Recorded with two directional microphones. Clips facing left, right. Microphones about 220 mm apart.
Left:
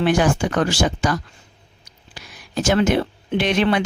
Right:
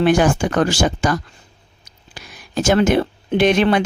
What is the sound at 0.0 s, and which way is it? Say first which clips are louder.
Speech: right 3 dB; 45° right (ahead or behind).